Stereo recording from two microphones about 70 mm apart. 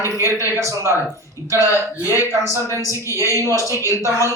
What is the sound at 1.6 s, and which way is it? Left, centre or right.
Speech, left.